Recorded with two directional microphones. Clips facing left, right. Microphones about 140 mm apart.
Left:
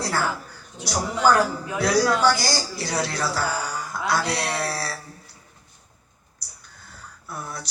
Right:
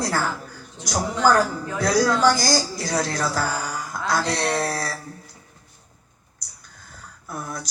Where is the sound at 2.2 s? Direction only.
40° right (ahead or behind).